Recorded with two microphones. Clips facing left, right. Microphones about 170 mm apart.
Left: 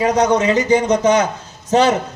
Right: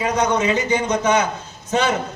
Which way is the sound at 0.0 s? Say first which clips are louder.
Left 5 dB; 40° left (ahead or behind).